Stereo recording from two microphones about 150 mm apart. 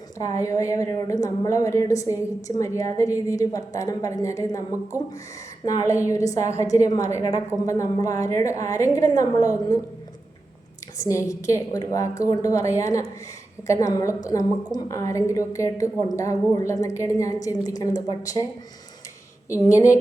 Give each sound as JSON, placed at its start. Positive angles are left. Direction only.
{"t": 0.3, "sound": "a woman's voice", "side_deg": 20}
{"t": 5.6, "sound": "a woman's voice", "side_deg": 20}
{"t": 10.9, "sound": "a woman's voice", "side_deg": 20}
{"t": 19.7, "sound": "a woman's voice", "side_deg": 20}